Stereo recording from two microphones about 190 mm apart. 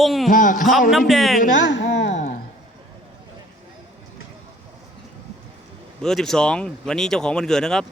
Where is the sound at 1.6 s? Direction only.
70° left (ahead or behind).